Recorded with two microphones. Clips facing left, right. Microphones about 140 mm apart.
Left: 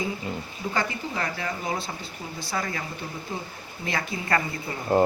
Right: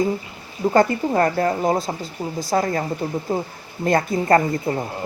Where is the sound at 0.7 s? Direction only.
50° right (ahead or behind).